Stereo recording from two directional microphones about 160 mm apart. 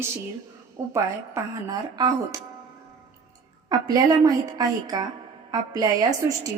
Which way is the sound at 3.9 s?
25° right (ahead or behind).